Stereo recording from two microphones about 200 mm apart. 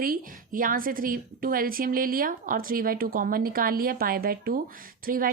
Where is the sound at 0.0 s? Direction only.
45° right (ahead or behind).